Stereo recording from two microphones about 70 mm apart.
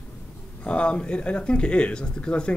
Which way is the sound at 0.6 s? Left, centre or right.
Centre.